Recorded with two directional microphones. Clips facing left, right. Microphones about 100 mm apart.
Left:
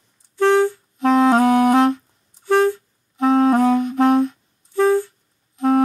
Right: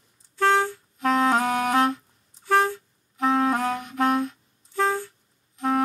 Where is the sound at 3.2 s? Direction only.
25° left (ahead or behind).